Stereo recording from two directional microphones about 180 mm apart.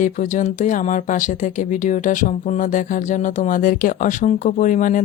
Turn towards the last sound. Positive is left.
turn(degrees=45)  # may be behind; listen again after turning